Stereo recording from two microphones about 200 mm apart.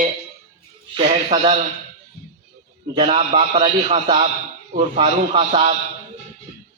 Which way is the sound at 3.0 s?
35° right (ahead or behind).